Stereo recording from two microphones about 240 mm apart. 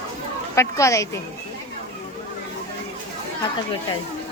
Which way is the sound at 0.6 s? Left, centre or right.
Centre.